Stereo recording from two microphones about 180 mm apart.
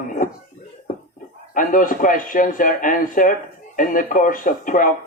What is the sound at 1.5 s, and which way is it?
Speech, 50° left (ahead or behind).